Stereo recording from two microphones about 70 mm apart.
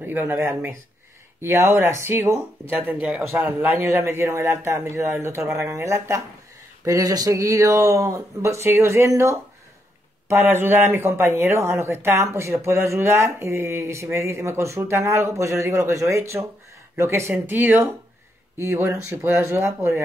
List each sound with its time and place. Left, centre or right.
0.0 s speech: right
1.4 s speech: right
2.7 s speech: right
6.8 s speech: right
10.2 s speech: right
18.6 s speech: right